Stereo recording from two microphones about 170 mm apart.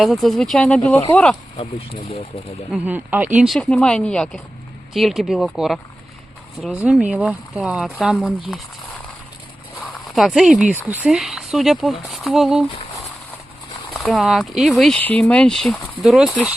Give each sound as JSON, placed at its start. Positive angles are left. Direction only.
{"t": 0.0, "sound": "speech", "side_deg": 0}
{"t": 1.5, "sound": "speech", "side_deg": 35}
{"t": 2.7, "sound": "speech", "side_deg": -10}
{"t": 10.2, "sound": "speech", "side_deg": 0}
{"t": 13.9, "sound": "speech", "side_deg": 5}